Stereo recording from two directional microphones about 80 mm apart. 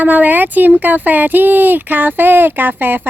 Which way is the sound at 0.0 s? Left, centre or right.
Right.